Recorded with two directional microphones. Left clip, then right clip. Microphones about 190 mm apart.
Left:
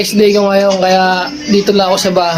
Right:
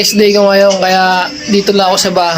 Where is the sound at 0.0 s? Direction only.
10° right (ahead or behind).